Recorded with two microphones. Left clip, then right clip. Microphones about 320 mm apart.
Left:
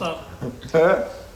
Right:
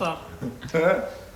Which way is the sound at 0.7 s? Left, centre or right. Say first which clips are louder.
Left 4 dB; centre.